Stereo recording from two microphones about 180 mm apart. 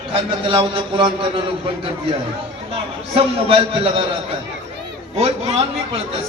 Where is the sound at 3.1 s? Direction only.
30° right (ahead or behind).